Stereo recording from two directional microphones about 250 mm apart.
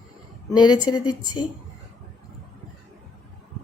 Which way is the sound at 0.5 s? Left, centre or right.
Centre.